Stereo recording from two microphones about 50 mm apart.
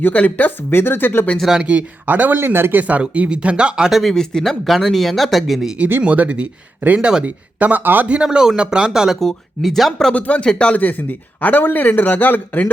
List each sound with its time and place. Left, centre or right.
0.0 s speech: left
0.7 s speech: left
1.6 s speech: right
2.4 s speech: right
2.8 s speech: right
3.8 s speech: centre
4.1 s speech: centre
6.0 s speech: right
7.0 s speech: centre
7.3 s speech: right
8.0 s speech: right
8.9 s speech: centre
10.1 s speech: left
11.3 s speech: left